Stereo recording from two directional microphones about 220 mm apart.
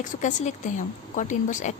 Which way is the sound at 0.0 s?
35° left (ahead or behind).